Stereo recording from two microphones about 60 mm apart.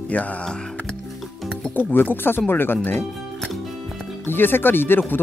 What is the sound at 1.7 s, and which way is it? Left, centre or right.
Speech, left.